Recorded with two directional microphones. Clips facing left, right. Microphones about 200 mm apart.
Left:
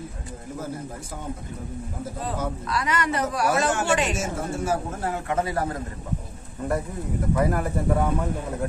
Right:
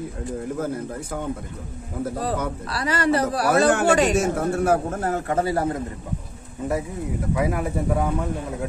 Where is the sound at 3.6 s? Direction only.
60° right (ahead or behind); by 5.8 s 25° right (ahead or behind).